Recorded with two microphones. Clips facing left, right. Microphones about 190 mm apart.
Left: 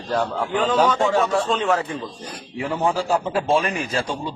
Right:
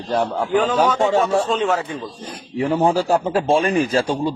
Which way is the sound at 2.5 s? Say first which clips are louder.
Right 5 dB; 35° right (ahead or behind).